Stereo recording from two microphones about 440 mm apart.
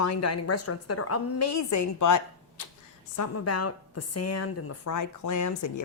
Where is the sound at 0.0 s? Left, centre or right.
Left.